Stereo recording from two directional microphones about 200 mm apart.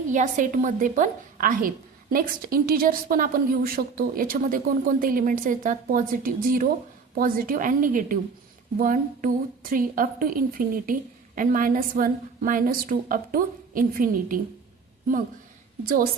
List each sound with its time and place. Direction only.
0.1 s a woman's voice: 40° right (ahead or behind)